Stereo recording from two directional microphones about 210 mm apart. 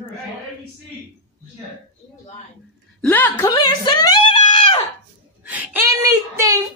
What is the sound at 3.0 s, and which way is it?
Speech, 10° left (ahead or behind).